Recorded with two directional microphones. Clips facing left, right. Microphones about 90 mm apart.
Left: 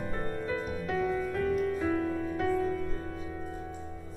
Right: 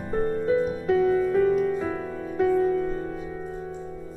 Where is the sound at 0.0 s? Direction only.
25° right (ahead or behind).